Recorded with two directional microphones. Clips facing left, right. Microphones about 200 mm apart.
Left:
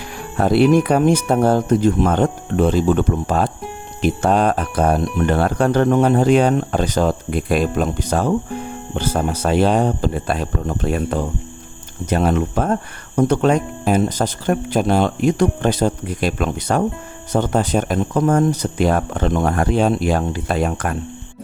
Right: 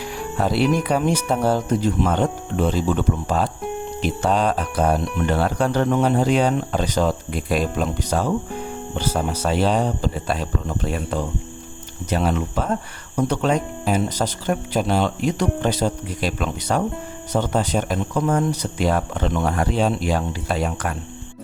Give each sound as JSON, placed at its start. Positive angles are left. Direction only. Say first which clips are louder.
{"t": 0.3, "sound": "speech", "louder": "left 6 dB", "side_deg": 55}